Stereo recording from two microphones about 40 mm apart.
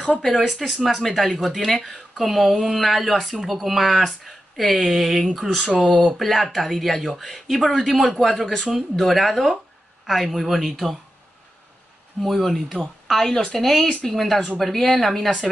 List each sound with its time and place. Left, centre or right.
0.5 s speech: centre
5.8 s speech: centre
6.1 s speech: centre
12.2 s speech: centre